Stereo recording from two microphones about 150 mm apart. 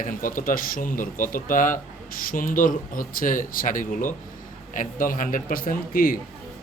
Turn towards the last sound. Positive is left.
turn(degrees=70)  # may be behind; listen again after turning